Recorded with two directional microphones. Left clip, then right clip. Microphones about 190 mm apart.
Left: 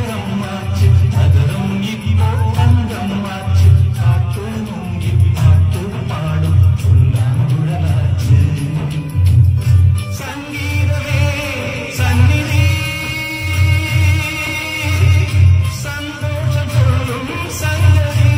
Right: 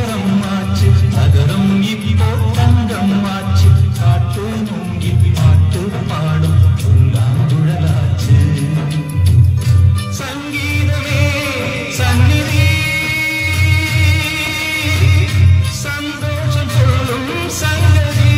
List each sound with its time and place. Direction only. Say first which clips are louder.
0.3 s music: right 4 dB; 25° right (ahead or behind)
11.1 s music: right 4 dB; 25° right (ahead or behind)